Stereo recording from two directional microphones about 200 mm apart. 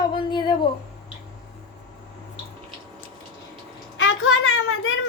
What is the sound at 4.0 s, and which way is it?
Child singing, 90° left.